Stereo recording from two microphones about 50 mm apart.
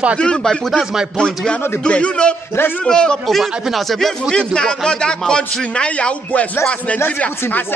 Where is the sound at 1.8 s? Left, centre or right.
Left.